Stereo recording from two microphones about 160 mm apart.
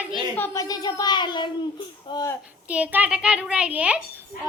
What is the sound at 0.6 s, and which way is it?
A child's voice, 25° left (ahead or behind).